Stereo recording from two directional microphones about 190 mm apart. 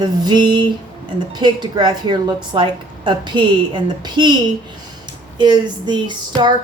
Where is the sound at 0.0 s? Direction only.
20° right (ahead or behind).